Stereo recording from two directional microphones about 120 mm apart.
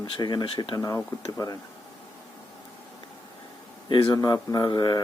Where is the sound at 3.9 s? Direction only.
40° left (ahead or behind).